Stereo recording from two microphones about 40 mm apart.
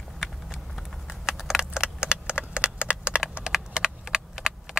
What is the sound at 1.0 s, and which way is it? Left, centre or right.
Keys jangling, centre.